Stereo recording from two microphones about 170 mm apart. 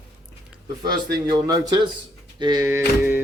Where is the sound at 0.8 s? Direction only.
25° right (ahead or behind).